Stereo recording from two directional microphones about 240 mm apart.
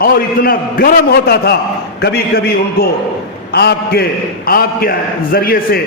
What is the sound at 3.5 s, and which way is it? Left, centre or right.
A man's voice, left.